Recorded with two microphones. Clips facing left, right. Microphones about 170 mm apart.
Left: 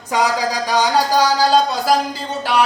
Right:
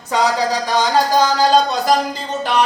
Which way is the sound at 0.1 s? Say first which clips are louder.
Right 1 dB; 10° left (ahead or behind).